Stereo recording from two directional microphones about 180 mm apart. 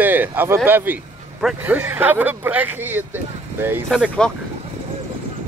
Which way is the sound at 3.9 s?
Centre (ahead or behind).